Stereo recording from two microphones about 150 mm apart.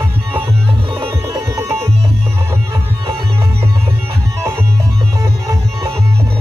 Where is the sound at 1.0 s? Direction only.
25° right (ahead or behind).